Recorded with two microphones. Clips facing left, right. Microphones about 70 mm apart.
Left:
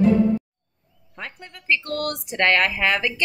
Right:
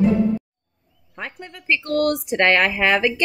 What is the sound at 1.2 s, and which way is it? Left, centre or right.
A woman's voice, centre.